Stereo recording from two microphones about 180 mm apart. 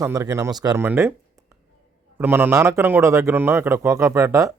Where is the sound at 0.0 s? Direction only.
15° right (ahead or behind).